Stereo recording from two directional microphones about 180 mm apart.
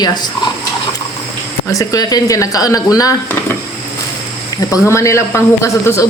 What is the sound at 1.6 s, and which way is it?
Speech, 20° left (ahead or behind).